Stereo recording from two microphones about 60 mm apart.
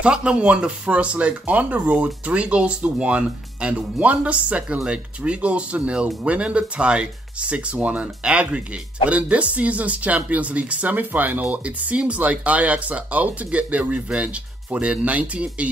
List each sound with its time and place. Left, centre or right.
0.0 s speech: centre